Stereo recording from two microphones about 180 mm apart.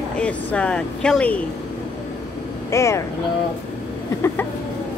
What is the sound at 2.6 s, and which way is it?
Speech, 15° left (ahead or behind).